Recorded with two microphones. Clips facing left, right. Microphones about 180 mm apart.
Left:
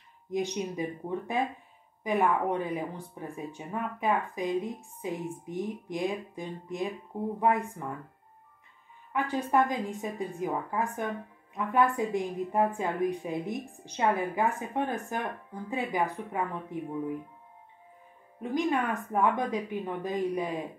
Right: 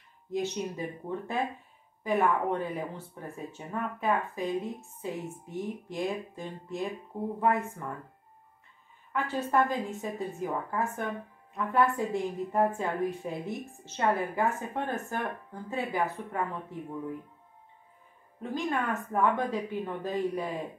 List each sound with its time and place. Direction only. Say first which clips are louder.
0.3 s a woman's voice: left 1 dB; 15° left (ahead or behind)
9.1 s a woman's voice: left 1 dB; 15° left (ahead or behind)
18.4 s a woman's voice: left 3 dB; 15° left (ahead or behind)